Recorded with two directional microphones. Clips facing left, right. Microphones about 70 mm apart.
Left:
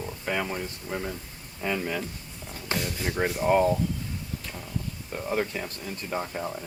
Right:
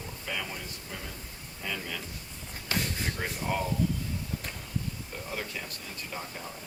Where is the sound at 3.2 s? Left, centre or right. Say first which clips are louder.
Left 11 dB; left.